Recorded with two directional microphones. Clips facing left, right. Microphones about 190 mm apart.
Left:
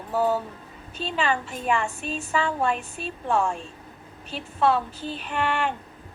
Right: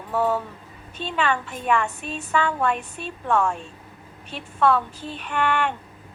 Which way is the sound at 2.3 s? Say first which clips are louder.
Right 2 dB; 30° left (ahead or behind).